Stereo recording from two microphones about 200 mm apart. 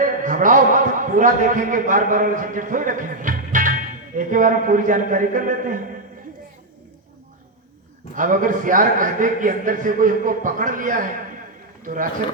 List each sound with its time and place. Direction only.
0.0 s a man's voice: 40° right (ahead or behind)
8.1 s a man's voice: 40° right (ahead or behind)